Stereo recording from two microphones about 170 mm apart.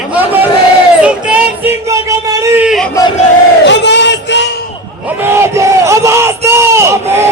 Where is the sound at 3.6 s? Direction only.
90° left.